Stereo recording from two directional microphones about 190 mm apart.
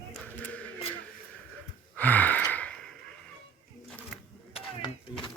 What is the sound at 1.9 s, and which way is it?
Gasp, 10° left (ahead or behind).